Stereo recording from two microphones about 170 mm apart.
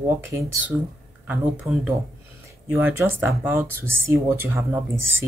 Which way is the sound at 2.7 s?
15° right (ahead or behind).